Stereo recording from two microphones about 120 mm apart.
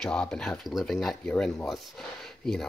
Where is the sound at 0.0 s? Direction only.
5° left (ahead or behind).